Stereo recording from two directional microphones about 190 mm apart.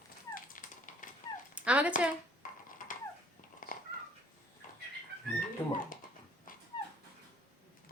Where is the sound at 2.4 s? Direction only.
45° left (ahead or behind).